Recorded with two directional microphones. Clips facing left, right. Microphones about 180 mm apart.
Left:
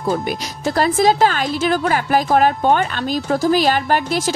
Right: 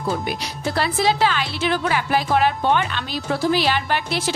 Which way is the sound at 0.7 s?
45° left (ahead or behind).